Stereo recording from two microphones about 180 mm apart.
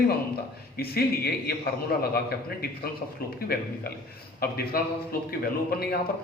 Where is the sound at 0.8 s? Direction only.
60° left (ahead or behind).